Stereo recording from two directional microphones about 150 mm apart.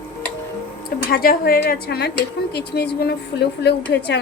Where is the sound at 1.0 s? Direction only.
90° left.